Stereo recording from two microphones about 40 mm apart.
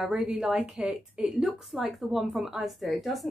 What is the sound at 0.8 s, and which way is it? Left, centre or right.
Speech, right.